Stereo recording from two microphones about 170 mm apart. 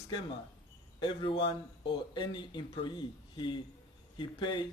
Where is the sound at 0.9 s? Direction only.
30° left (ahead or behind).